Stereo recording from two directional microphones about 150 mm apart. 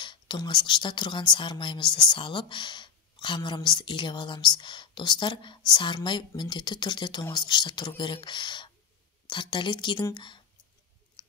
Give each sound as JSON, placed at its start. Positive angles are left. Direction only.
{"t": 0.0, "sound": "speech", "side_deg": 30}
{"t": 11.2, "sound": "clicking", "side_deg": 35}